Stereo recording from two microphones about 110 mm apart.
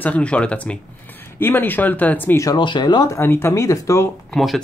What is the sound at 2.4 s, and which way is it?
Speech, 40° left (ahead or behind).